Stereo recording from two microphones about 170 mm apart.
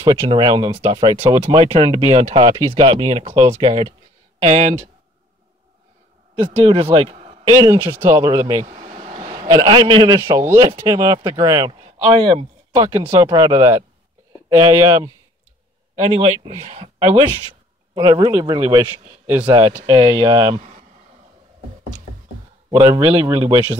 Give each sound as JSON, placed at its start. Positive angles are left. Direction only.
{"t": 0.0, "sound": "a man's voice", "side_deg": -25}
{"t": 4.4, "sound": "speech", "side_deg": -45}
{"t": 6.4, "sound": "speech", "side_deg": -30}
{"t": 7.5, "sound": "speech", "side_deg": -15}
{"t": 8.6, "sound": "air conditioning", "side_deg": -40}
{"t": 9.3, "sound": "a man's voice", "side_deg": -25}
{"t": 16.0, "sound": "speech", "side_deg": -30}
{"t": 17.9, "sound": "a man's voice", "side_deg": -20}
{"t": 19.7, "sound": "speech", "side_deg": -35}
{"t": 20.2, "sound": "a man's voice", "side_deg": -20}
{"t": 22.7, "sound": "speech", "side_deg": -20}